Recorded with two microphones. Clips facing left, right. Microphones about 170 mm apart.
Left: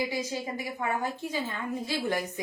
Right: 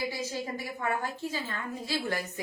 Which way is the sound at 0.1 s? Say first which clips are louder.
Left 2 dB; 15° left (ahead or behind).